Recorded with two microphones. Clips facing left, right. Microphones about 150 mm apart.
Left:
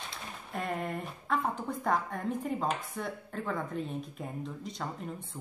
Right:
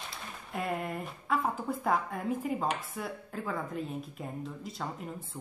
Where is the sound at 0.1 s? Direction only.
5° right (ahead or behind).